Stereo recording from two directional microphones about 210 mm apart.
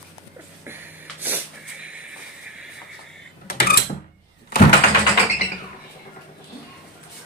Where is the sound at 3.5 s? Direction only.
45° left (ahead or behind).